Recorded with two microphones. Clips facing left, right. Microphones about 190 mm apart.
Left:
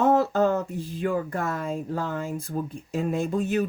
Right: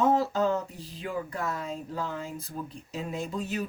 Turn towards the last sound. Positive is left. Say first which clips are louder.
# left 8 dB
turn(degrees=50)  # may be behind; listen again after turning